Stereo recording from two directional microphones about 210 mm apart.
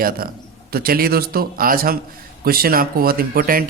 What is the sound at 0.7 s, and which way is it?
A man's voice, 45° right (ahead or behind).